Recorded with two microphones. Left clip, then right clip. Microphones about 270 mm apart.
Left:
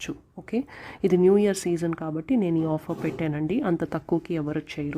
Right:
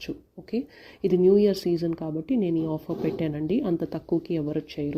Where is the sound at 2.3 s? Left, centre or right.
Left.